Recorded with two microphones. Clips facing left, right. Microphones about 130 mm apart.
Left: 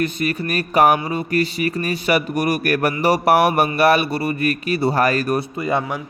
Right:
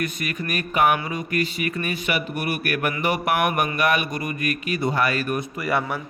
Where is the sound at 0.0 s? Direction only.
30° left (ahead or behind).